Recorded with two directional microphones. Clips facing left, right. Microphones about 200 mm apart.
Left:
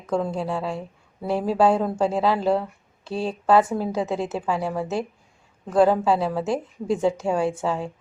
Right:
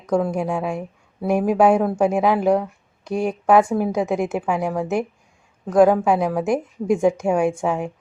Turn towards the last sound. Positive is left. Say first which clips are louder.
# right 4 dB
turn(degrees=-15)  # may be behind; listen again after turning